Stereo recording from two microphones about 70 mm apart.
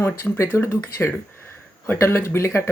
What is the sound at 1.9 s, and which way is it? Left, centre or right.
Speech, left.